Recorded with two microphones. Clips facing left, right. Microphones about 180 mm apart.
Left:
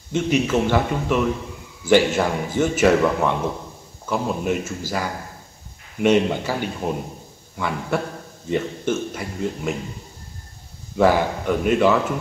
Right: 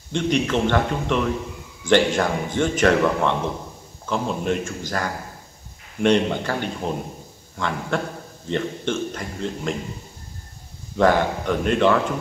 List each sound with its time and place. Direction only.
0.1 s a man's voice: 5° left (ahead or behind)
11.0 s a man's voice: 5° left (ahead or behind)